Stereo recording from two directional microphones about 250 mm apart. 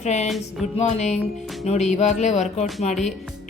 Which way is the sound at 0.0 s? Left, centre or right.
Left.